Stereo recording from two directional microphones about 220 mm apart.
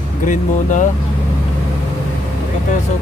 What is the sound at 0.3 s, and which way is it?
Speech, 35° left (ahead or behind).